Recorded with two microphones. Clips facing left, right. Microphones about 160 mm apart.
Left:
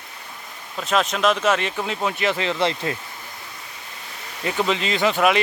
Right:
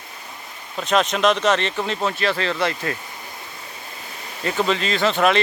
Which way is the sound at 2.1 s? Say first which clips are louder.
Even; 15° left (ahead or behind).